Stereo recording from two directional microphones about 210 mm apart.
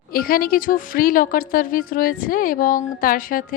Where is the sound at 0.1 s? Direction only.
45° left (ahead or behind).